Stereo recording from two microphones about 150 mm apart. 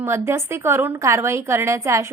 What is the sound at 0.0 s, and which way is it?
A woman's voice, 15° right (ahead or behind).